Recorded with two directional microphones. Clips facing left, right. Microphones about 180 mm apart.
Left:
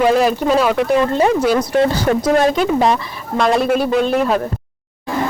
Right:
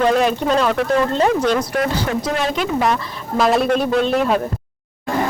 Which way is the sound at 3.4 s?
Centre (ahead or behind).